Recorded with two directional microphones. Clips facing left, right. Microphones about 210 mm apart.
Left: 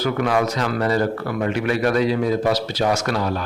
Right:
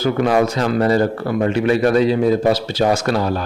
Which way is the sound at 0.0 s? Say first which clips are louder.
Right 4 dB; 25° right (ahead or behind).